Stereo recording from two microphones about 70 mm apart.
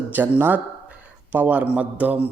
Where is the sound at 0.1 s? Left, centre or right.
Right.